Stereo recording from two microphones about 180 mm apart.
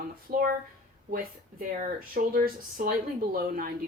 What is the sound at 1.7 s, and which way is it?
Speech, 50° right (ahead or behind).